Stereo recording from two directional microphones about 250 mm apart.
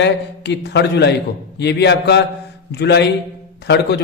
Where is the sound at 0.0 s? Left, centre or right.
Left.